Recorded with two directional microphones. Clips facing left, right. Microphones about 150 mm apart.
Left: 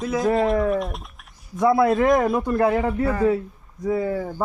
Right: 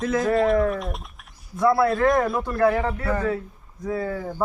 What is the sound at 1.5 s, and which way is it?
A man's voice, 20° left (ahead or behind).